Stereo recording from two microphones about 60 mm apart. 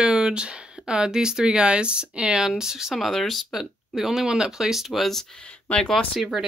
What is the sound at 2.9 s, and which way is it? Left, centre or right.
Speech, centre.